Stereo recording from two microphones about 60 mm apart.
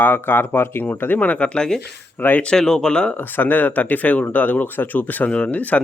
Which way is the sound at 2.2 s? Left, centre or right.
Left.